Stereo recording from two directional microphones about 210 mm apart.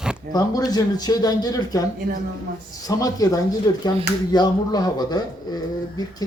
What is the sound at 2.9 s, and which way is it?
Speech, 15° left (ahead or behind).